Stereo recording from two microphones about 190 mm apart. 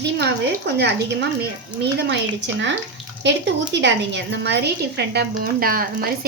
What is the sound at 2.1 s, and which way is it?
A woman's voice, 70° right (ahead or behind).